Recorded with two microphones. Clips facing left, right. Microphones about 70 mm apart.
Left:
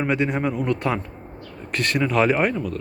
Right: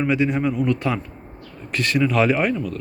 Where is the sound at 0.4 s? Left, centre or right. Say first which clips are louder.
Right 2 dB; left.